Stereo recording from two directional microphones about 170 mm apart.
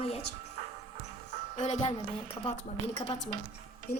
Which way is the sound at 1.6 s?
45° left (ahead or behind).